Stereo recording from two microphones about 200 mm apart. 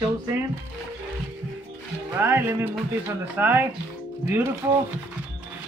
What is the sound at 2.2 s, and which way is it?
Speech, 10° right (ahead or behind).